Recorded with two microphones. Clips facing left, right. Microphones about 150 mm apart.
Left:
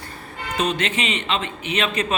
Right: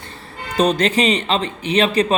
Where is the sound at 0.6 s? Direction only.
35° right (ahead or behind).